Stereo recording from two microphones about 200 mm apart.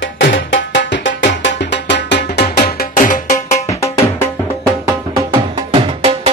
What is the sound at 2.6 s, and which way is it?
Music, 50° left (ahead or behind).